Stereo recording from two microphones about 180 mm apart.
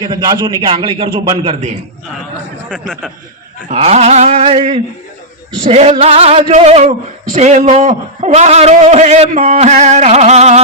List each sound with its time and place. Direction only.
0.0 s a man's voice: 25° right (ahead or behind)
2.6 s speech: 5° left (ahead or behind)
3.7 s a man's voice: 35° right (ahead or behind)